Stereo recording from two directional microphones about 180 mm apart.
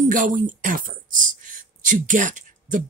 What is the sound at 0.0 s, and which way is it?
Speech, 45° right (ahead or behind).